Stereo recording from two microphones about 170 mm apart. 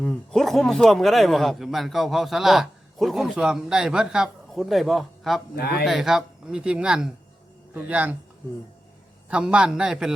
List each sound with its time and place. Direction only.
0.0 s speech: 5° left (ahead or behind)
5.5 s speech: 70° left (ahead or behind)
5.8 s speech: centre (ahead or behind)
9.3 s speech: 5° right (ahead or behind)